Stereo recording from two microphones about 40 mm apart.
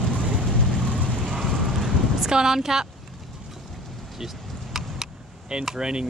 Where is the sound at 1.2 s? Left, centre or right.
Centre.